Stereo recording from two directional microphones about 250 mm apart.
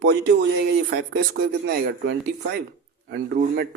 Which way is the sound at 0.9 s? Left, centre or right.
Right.